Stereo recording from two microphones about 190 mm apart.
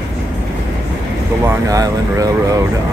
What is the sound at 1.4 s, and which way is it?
Speech, 20° right (ahead or behind).